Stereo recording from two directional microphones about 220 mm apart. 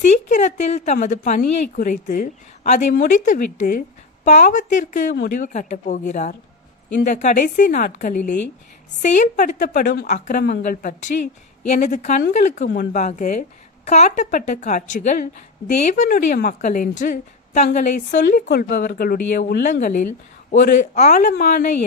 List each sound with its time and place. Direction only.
0.1 s a woman's voice: 30° left (ahead or behind)